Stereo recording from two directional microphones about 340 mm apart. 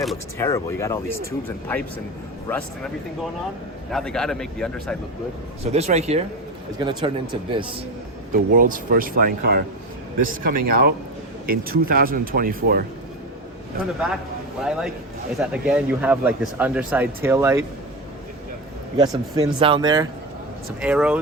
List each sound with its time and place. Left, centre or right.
0.0 s speech: centre
2.5 s speech: centre
3.9 s speech: centre
5.7 s speech: centre
8.3 s speech: right
14.6 s speech: centre
19.1 s speech: centre